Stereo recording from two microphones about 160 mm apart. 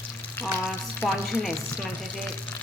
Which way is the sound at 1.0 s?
Centre (ahead or behind).